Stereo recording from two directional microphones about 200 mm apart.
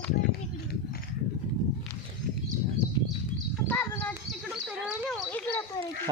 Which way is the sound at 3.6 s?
10° left (ahead or behind).